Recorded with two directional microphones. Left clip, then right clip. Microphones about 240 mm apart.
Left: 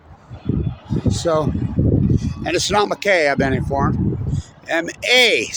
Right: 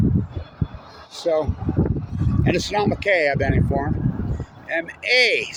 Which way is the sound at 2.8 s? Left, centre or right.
Left.